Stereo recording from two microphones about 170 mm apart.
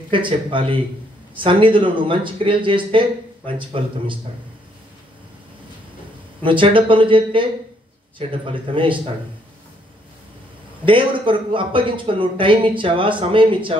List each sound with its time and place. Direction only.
0.1 s speech: 30° right (ahead or behind)
6.4 s speech: 30° right (ahead or behind)
10.9 s speech: 30° right (ahead or behind)